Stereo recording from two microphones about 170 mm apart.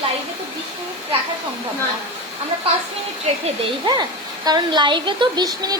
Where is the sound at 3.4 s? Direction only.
30° right (ahead or behind).